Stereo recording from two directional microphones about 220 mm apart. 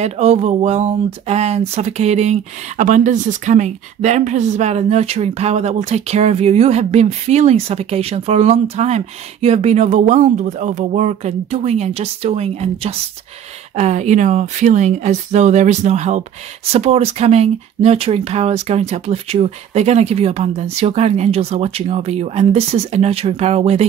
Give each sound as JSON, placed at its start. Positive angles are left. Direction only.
{"t": 0.0, "sound": "speech", "side_deg": -30}